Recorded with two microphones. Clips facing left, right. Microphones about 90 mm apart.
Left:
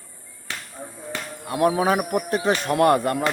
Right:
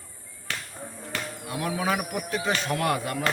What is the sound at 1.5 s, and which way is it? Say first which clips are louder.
Speech: left 8 dB; 40° left (ahead or behind).